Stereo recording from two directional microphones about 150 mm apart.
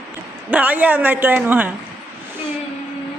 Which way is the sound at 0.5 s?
10° right (ahead or behind).